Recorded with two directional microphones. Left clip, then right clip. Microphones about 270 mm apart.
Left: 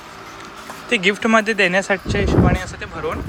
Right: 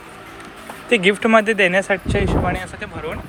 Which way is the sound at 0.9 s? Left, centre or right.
Centre.